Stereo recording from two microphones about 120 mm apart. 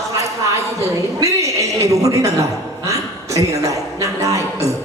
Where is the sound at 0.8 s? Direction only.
25° right (ahead or behind).